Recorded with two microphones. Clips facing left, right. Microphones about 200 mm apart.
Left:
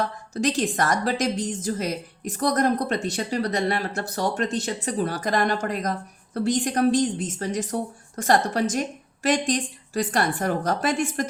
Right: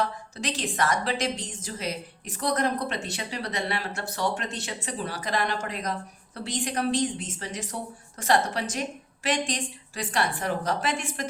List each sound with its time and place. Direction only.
0.3 s a woman's voice: 45° left (ahead or behind)